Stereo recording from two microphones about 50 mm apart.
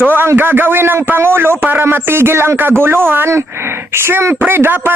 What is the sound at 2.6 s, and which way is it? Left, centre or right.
Speech, right.